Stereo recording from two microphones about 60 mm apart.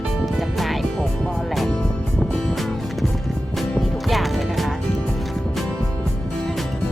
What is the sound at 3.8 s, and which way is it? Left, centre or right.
Music, centre.